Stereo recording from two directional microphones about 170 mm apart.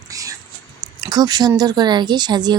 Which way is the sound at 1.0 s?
25° right (ahead or behind).